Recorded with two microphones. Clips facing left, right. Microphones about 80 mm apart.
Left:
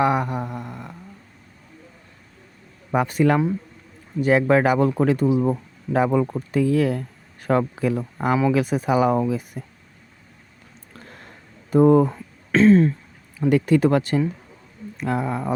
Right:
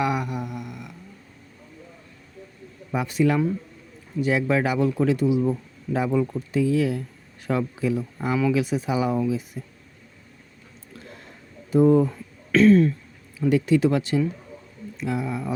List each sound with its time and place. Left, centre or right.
0.0 s a sound: left
2.9 s speech: left
11.7 s speech: left
12.1 s throat clearing: left
13.5 s speech: left